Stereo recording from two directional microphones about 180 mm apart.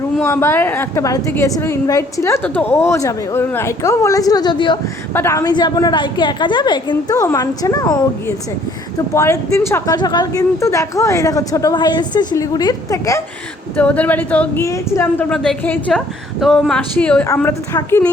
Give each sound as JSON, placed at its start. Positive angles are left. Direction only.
{"t": 0.2, "sound": "a woman's voice", "side_deg": 15}
{"t": 5.1, "sound": "speech", "side_deg": 15}
{"t": 9.1, "sound": "speech", "side_deg": 15}
{"t": 13.7, "sound": "a woman's voice", "side_deg": 10}